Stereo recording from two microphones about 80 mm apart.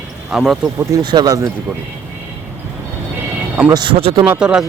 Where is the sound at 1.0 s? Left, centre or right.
Right.